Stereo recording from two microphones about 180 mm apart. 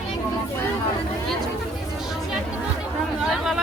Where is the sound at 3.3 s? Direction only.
Centre (ahead or behind).